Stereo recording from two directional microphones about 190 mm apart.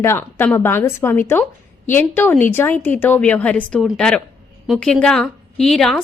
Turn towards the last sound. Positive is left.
turn(degrees=0)  # may be behind; listen again after turning